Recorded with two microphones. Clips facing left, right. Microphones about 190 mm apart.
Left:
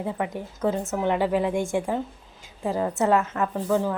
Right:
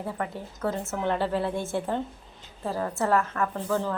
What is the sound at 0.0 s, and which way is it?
A woman's voice, 15° left (ahead or behind).